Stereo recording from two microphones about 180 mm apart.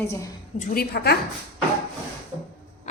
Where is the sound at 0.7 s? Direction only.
65° left (ahead or behind).